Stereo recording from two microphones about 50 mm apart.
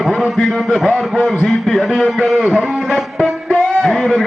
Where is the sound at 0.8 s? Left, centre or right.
Centre.